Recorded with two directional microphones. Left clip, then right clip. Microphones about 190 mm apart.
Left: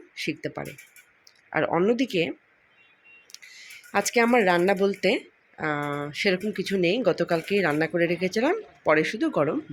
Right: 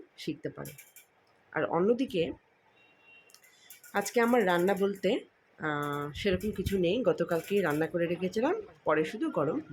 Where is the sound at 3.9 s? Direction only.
20° left (ahead or behind).